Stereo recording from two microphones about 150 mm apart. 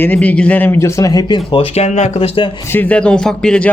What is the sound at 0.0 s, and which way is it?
Speech, 10° left (ahead or behind).